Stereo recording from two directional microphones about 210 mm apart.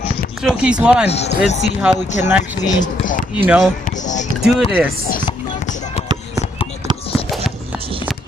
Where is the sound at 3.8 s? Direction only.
35° left (ahead or behind).